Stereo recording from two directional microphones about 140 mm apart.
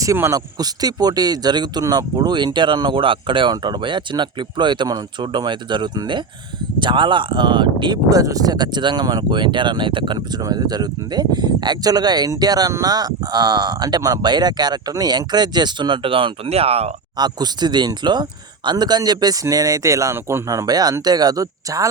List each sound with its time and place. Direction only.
0.0 s speech: 20° right (ahead or behind); by 16.9 s 45° right (ahead or behind)
17.2 s speech: 30° right (ahead or behind)